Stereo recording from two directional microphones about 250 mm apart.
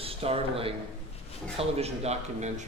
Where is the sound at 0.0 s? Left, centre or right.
Right.